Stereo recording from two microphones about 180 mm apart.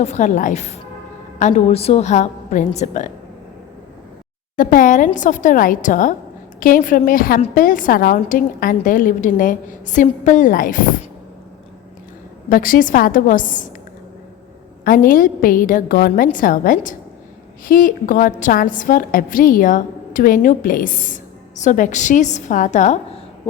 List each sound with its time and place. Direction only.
0.0 s a woman's voice: 40° left (ahead or behind)
4.5 s a woman's voice: 50° left (ahead or behind)
12.5 s a woman's voice: 50° left (ahead or behind)
14.8 s a woman's voice: 50° left (ahead or behind)